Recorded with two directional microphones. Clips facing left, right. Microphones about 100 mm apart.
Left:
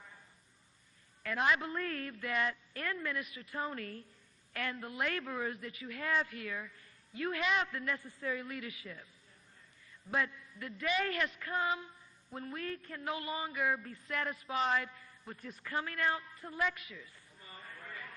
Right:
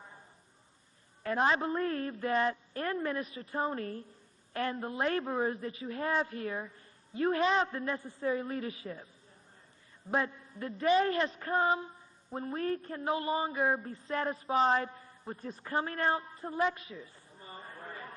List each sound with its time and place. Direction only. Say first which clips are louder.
1.2 s a woman's voice: right 4 dB; 35° right (ahead or behind)
10.1 s a woman's voice: right 4 dB; 30° right (ahead or behind)